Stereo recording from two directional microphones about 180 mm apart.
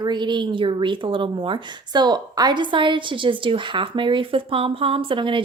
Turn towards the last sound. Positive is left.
turn(degrees=-25)  # may be behind; listen again after turning